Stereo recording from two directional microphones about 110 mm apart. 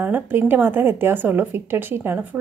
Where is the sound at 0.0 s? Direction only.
20° right (ahead or behind).